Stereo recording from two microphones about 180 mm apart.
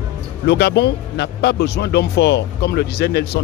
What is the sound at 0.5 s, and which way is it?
Speech, 70° left (ahead or behind).